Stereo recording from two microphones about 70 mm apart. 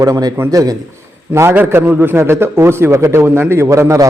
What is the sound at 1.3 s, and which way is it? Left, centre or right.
A man's voice, right.